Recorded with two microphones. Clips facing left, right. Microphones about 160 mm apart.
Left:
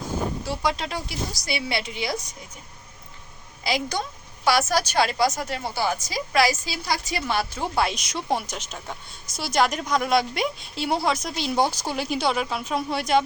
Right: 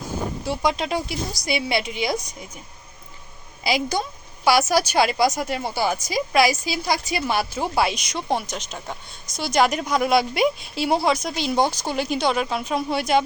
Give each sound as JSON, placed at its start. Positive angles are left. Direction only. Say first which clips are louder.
{"t": 0.4, "sound": "a woman's voice", "louder": "right 3 dB", "side_deg": -15}
{"t": 3.6, "sound": "a woman's voice", "louder": "right 3 dB", "side_deg": -10}